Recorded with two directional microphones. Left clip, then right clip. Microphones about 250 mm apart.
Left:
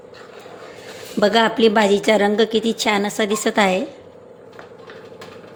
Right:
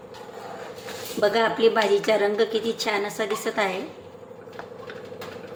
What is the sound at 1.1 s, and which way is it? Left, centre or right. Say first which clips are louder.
A woman's voice: left 5 dB; left.